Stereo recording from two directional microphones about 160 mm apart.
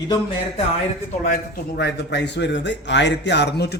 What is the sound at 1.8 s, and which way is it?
A man's voice, 90° left.